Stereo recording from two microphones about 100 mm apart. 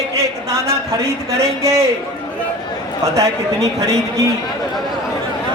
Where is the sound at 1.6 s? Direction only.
30° right (ahead or behind).